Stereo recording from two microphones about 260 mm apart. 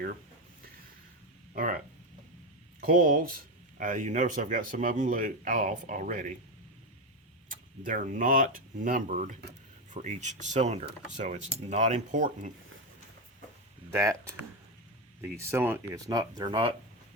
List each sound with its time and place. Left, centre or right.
1.5 s speech: right
3.0 s speech: right
7.5 s speech: right
13.9 s speech: centre